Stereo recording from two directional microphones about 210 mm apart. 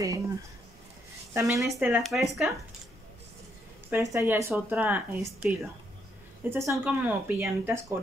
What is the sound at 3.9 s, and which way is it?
Speech, 15° right (ahead or behind).